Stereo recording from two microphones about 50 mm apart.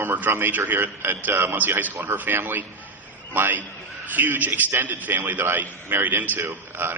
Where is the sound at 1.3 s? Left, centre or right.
Right.